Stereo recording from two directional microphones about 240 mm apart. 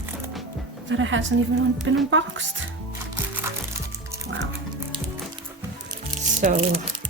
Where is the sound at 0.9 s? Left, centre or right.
Right.